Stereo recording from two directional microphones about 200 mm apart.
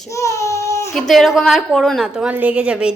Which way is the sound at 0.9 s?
Centre (ahead or behind).